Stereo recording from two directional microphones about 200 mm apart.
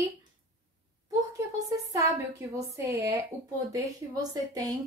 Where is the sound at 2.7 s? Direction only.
15° right (ahead or behind).